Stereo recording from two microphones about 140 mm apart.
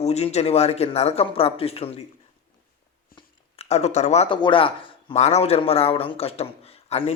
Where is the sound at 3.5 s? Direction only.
55° left (ahead or behind).